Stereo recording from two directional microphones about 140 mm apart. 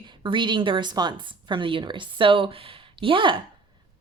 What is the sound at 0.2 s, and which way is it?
Speech, 35° right (ahead or behind).